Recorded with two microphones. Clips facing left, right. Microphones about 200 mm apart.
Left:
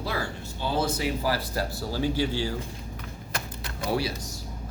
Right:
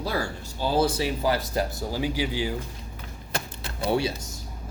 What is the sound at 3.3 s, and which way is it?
Typewriter, 30° right (ahead or behind).